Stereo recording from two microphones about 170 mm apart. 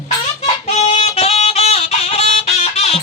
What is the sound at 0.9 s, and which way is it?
Music, 35° left (ahead or behind).